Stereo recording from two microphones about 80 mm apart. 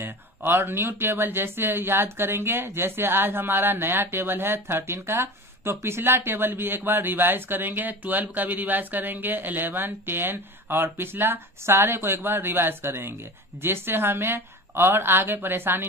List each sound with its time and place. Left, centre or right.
0.0 s speech: right